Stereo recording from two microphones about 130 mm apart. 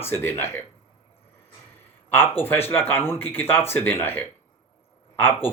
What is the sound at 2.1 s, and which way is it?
Speech, 15° left (ahead or behind).